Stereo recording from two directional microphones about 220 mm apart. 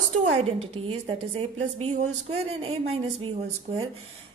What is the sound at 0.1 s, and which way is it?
A woman's voice, 30° right (ahead or behind).